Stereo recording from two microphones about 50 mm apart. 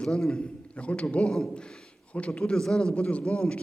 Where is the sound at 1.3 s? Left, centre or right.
Centre.